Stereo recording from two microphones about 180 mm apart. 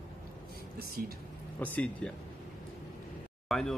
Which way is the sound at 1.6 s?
10° left (ahead or behind).